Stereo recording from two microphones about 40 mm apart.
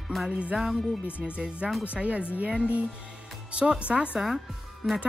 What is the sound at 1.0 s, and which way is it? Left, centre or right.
Speech, right.